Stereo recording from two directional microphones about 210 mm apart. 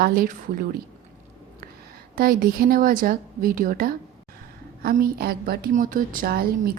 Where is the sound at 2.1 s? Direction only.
45° right (ahead or behind).